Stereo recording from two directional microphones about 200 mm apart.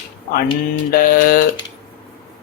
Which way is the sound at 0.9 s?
45° left (ahead or behind).